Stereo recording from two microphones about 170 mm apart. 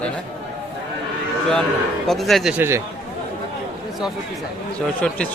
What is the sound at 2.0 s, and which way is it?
Speech, centre (ahead or behind).